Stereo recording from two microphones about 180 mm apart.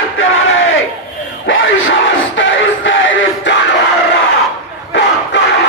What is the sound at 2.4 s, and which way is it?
Music, 90° left.